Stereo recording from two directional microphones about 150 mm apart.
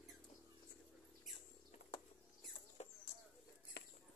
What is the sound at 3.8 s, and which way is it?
Cutlery, 90° left.